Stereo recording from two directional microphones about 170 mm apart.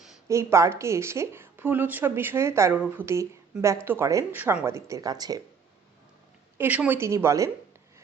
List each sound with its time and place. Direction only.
0.3 s a woman's voice: 15° right (ahead or behind)
6.6 s a woman's voice: 10° right (ahead or behind)